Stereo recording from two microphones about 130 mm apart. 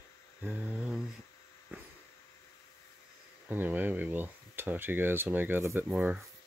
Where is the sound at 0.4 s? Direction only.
10° right (ahead or behind).